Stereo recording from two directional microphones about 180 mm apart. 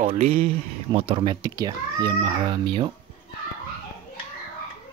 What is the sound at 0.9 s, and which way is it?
Speech, 30° right (ahead or behind).